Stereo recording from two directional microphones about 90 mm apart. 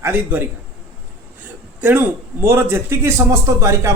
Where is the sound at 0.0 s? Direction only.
25° right (ahead or behind).